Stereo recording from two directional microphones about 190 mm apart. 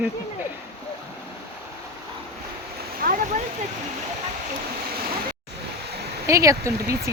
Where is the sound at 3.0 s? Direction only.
40° right (ahead or behind).